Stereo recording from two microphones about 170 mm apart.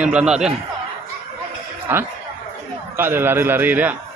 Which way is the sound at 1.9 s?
10° right (ahead or behind).